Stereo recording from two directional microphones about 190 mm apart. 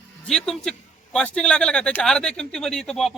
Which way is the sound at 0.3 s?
Centre (ahead or behind).